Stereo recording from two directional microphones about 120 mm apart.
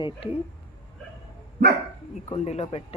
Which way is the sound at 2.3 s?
55° left (ahead or behind).